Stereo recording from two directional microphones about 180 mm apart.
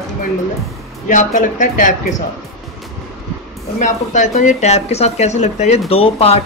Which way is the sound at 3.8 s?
45° left (ahead or behind).